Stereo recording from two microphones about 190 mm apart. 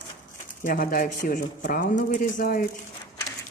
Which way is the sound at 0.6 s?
45° left (ahead or behind).